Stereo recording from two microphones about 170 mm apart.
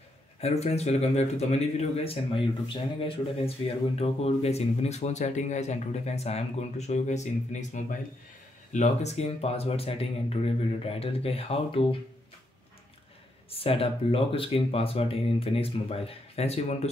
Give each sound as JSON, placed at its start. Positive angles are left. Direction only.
{"t": 0.4, "sound": "a man's voice", "side_deg": 40}
{"t": 13.5, "sound": "a man's voice", "side_deg": 35}